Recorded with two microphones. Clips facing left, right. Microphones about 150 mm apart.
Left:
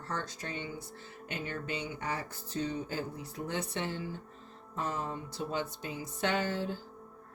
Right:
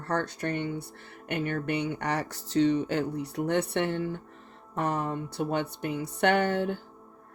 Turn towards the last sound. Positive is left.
turn(degrees=-65)  # may be behind; listen again after turning